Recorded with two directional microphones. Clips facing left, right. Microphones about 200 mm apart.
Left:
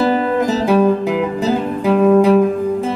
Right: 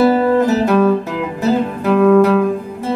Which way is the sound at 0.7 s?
15° left (ahead or behind).